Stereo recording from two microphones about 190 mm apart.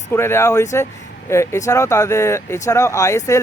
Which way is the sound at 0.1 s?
15° left (ahead or behind).